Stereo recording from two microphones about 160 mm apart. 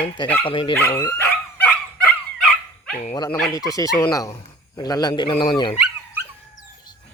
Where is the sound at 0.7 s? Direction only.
15° left (ahead or behind).